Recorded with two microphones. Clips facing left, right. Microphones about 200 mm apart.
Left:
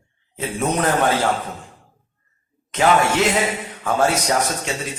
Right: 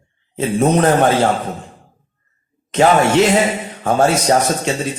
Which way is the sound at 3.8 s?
40° right (ahead or behind).